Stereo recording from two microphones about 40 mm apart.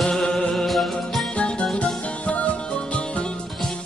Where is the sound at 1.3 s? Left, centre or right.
Left.